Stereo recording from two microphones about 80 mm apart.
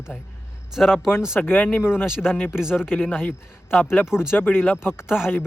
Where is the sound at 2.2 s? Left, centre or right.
Centre.